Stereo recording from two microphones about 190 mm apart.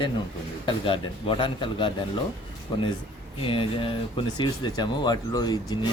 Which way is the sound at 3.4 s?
30° left (ahead or behind).